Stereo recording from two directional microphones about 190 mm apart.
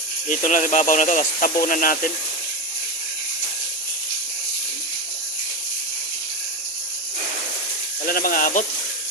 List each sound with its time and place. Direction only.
0.3 s speech: 45° left (ahead or behind)
8.0 s speech: 50° left (ahead or behind)